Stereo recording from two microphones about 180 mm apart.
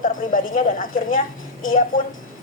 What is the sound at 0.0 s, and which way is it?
Speech, 50° left (ahead or behind).